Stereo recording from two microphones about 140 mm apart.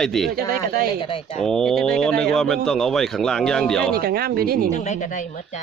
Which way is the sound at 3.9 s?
90° right.